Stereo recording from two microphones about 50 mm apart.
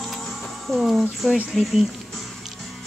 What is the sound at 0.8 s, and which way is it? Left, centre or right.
Speech, centre.